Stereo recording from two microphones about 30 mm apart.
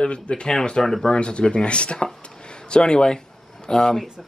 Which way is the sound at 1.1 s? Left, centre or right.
Left.